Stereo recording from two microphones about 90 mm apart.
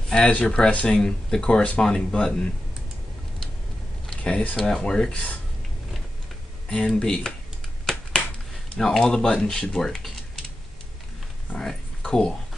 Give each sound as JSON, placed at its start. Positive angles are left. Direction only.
{"t": 0.1, "sound": "speech", "side_deg": 10}
{"t": 4.1, "sound": "speech", "side_deg": 10}
{"t": 5.1, "sound": "speech", "side_deg": 15}
{"t": 7.0, "sound": "speech", "side_deg": 10}
{"t": 7.8, "sound": "a sound", "side_deg": 5}
{"t": 8.7, "sound": "speech", "side_deg": 5}
{"t": 11.5, "sound": "a sound", "side_deg": 10}